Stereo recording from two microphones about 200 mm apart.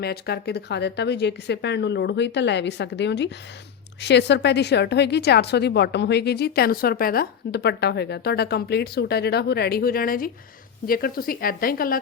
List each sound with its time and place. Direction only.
0.0 s a woman's voice: 55° left (ahead or behind)